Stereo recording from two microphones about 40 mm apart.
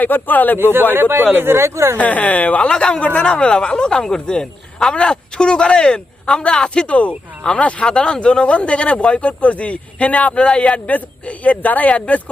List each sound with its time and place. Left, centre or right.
0.0 s speech: left
0.6 s speech: right
2.0 s speech: left
2.6 s a man's voice: left